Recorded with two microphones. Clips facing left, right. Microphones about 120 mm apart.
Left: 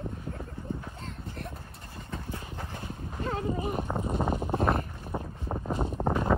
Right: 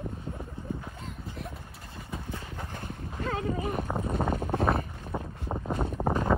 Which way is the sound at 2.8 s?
15° left (ahead or behind).